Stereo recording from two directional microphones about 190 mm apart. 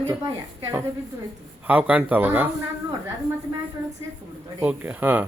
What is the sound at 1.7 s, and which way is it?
Speech, 10° right (ahead or behind).